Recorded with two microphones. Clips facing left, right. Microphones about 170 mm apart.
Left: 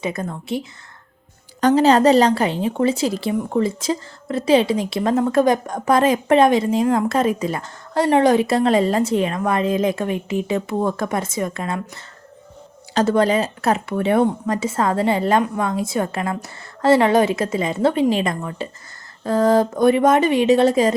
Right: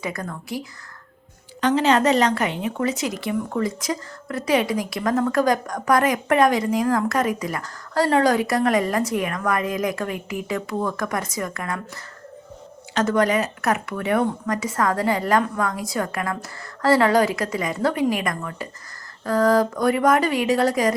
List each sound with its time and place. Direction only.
0.0 s a woman's voice: 25° left (ahead or behind)
1.6 s a woman's voice: 35° left (ahead or behind)
12.9 s a woman's voice: 30° left (ahead or behind)